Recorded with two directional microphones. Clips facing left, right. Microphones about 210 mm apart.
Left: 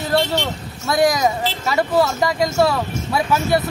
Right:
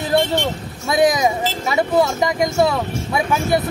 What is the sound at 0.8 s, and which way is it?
Speech, 20° right (ahead or behind).